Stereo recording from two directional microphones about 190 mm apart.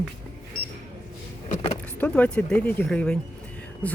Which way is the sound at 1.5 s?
40° left (ahead or behind).